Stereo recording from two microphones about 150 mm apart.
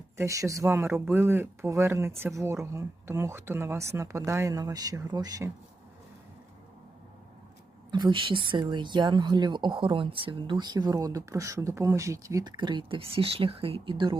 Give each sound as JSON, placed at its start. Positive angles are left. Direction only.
{"t": 0.2, "sound": "speech", "side_deg": -20}
{"t": 7.9, "sound": "a woman's voice", "side_deg": -30}